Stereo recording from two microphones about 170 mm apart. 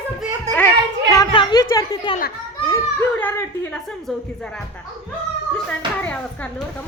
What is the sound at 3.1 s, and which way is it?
Chuckle, 10° left (ahead or behind).